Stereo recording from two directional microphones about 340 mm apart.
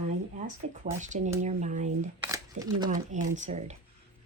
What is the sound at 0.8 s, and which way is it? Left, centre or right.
Speech, right.